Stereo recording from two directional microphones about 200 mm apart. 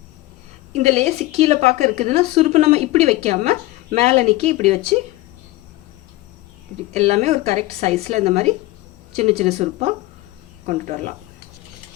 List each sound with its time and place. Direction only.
0.7 s a woman's voice: 35° right (ahead or behind)
6.9 s a woman's voice: 35° right (ahead or behind)